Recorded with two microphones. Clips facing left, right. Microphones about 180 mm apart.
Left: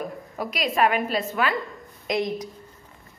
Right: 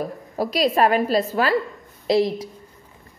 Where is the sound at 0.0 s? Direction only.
35° right (ahead or behind).